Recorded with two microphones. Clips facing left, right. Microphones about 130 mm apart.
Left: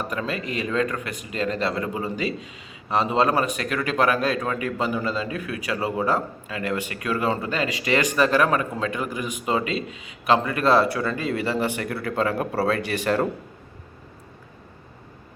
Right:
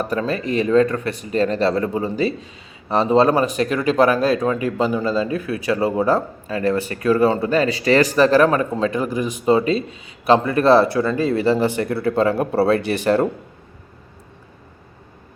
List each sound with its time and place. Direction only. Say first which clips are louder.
0.1 s speech: right 7 dB; 35° right (ahead or behind)